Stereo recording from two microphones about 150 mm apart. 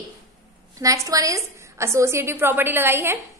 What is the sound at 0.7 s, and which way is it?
A woman's voice, 20° right (ahead or behind).